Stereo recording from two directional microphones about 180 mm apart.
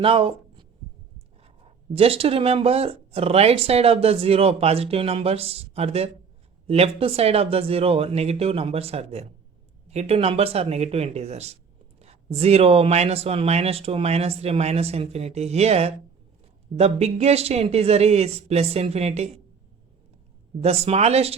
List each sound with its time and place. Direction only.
0.0 s speech: 30° right (ahead or behind)
1.9 s speech: 35° right (ahead or behind)
20.6 s speech: 35° right (ahead or behind)